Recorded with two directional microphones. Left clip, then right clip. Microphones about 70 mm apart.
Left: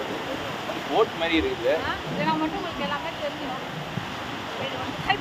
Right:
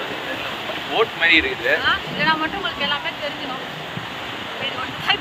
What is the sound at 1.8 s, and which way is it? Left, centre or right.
Speech, centre.